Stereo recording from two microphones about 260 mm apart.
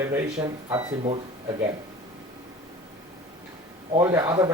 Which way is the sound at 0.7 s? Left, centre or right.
Right.